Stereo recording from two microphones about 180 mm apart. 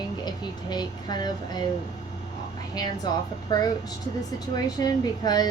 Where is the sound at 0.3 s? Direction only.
25° left (ahead or behind).